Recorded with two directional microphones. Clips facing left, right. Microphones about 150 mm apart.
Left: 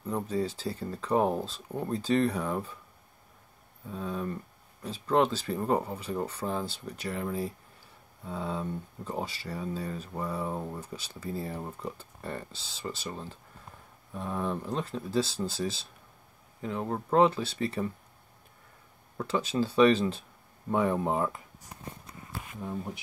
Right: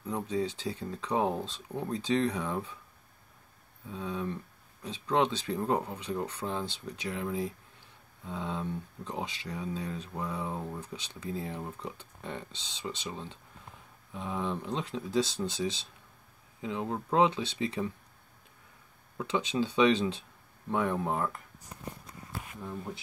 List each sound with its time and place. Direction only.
0.1 s speech: 5° left (ahead or behind)
3.9 s speech: centre (ahead or behind)
19.2 s speech: 5° left (ahead or behind)
22.6 s speech: 20° left (ahead or behind)